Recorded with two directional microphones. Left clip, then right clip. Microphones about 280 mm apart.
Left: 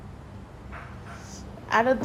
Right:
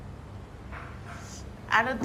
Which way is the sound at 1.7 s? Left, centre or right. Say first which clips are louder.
Left 3 dB; left.